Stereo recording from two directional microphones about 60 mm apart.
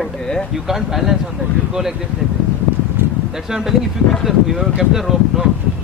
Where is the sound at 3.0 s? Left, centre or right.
Right.